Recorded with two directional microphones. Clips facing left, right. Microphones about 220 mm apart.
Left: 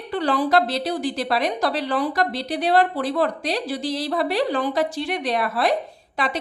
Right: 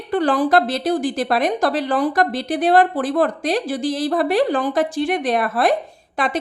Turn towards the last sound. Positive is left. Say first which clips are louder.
# right 4 dB
turn(degrees=-50)  # may be behind; listen again after turning